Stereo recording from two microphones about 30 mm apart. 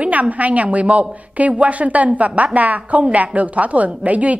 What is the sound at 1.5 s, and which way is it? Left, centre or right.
A woman's voice, right.